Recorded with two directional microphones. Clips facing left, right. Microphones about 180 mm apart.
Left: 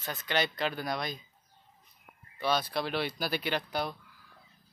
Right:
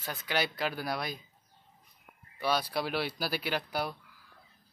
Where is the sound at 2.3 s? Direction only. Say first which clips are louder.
Even; 10° right (ahead or behind).